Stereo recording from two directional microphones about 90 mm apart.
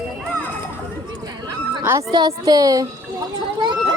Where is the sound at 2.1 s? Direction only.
50° right (ahead or behind).